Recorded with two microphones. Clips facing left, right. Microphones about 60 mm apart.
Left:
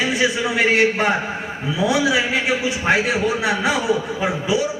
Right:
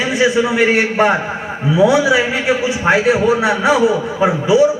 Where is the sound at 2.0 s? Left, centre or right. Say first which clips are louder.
Right 4 dB; centre.